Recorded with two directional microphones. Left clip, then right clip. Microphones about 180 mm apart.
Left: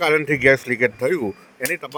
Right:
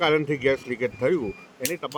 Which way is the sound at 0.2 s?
30° left (ahead or behind).